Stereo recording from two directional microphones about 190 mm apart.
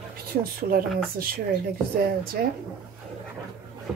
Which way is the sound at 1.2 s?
50° right (ahead or behind).